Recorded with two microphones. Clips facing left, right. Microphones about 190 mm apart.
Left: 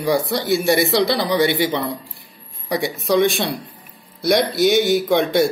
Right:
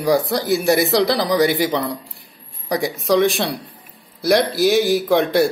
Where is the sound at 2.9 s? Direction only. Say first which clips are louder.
Even; centre (ahead or behind).